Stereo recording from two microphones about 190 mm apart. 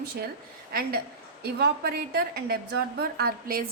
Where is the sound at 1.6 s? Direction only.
55° right (ahead or behind).